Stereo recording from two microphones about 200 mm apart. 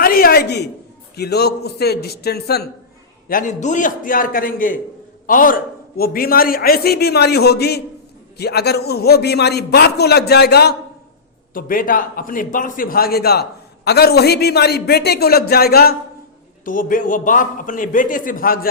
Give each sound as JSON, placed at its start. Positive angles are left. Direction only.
{"t": 0.0, "sound": "a woman's voice", "side_deg": 45}
{"t": 3.2, "sound": "a man's voice", "side_deg": 40}